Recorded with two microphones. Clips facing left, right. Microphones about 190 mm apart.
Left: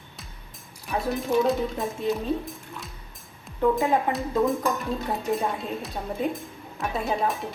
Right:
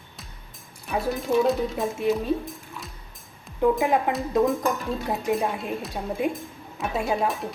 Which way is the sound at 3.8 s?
15° right (ahead or behind).